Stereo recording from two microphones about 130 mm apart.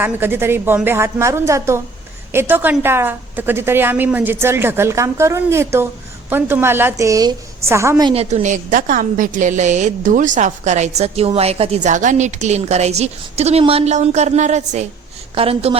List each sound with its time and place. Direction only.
0.0 s a woman's voice: 15° right (ahead or behind)
8.1 s a woman's voice: 55° right (ahead or behind)
15.4 s a woman's voice: 50° right (ahead or behind)